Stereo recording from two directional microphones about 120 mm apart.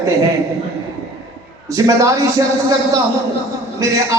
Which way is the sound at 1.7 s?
30° right (ahead or behind).